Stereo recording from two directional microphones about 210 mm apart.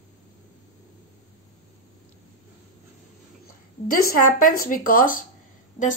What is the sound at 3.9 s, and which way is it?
A woman's voice, 40° left (ahead or behind).